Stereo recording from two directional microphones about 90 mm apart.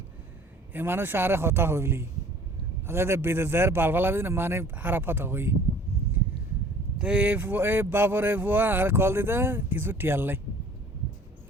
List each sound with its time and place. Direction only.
0.7 s speech: 25° right (ahead or behind)
7.0 s speech: 15° right (ahead or behind)